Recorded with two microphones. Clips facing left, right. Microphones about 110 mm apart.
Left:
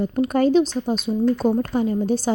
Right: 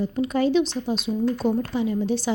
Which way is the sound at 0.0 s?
50° left (ahead or behind).